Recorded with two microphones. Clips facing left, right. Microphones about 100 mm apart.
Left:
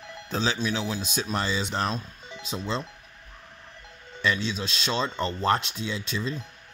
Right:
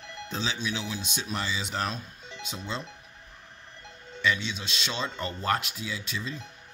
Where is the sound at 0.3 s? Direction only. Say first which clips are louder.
Left 5 dB; 40° left (ahead or behind).